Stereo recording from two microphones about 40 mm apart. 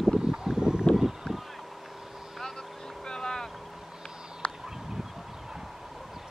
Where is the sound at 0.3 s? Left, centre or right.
Centre.